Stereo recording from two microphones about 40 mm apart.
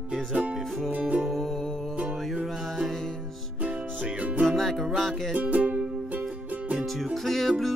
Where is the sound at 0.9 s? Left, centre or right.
Right.